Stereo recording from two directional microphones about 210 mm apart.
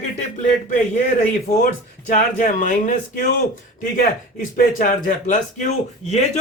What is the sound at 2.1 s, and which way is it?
Speech, 40° left (ahead or behind).